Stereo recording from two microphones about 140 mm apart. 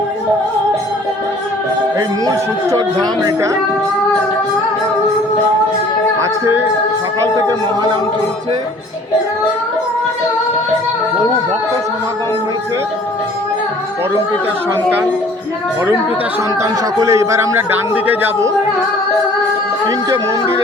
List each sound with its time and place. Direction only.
2.0 s speech: 25° right (ahead or behind)
17.0 s speech: 20° right (ahead or behind)